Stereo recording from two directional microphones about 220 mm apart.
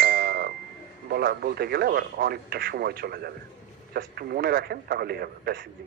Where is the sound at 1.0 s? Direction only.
45° right (ahead or behind).